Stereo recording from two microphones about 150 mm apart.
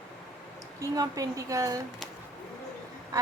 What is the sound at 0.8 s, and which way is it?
A woman's voice, 20° right (ahead or behind).